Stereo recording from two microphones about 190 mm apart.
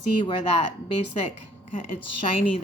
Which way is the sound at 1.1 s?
40° left (ahead or behind).